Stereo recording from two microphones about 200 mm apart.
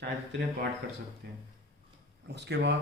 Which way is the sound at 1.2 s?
50° right (ahead or behind).